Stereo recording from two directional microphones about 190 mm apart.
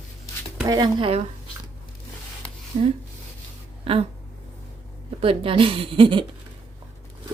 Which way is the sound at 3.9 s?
30° right (ahead or behind).